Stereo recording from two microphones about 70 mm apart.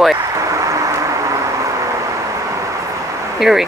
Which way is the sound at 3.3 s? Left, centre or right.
Centre.